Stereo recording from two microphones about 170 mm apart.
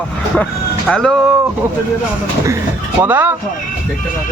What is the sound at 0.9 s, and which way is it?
Speech, 5° left (ahead or behind).